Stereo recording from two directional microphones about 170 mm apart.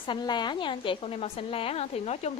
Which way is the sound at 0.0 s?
25° left (ahead or behind).